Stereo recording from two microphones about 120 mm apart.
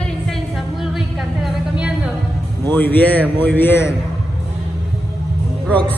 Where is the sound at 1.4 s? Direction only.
5° right (ahead or behind).